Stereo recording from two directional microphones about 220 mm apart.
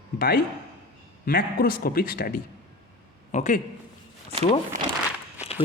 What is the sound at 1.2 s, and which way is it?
Speech, 40° left (ahead or behind).